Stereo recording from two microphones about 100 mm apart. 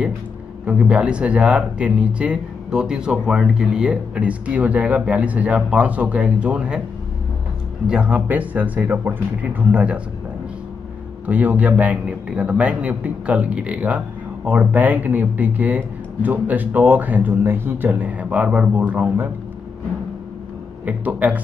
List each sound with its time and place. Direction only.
0.7 s a man's voice: 10° right (ahead or behind)
7.8 s a man's voice: 10° right (ahead or behind)
11.2 s a man's voice: 15° right (ahead or behind)
20.8 s a man's voice: 15° right (ahead or behind)